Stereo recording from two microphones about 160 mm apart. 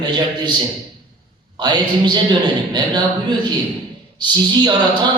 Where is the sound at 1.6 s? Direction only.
30° right (ahead or behind).